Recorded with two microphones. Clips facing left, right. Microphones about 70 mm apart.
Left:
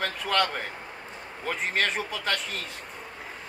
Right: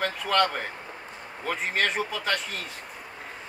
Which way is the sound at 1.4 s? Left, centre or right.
Centre.